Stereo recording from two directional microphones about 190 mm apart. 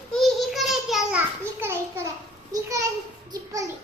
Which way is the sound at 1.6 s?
15° right (ahead or behind).